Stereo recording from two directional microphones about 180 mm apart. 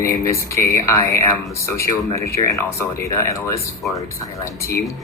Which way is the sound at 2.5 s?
15° left (ahead or behind).